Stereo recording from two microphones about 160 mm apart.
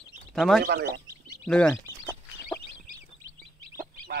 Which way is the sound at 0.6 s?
85° right.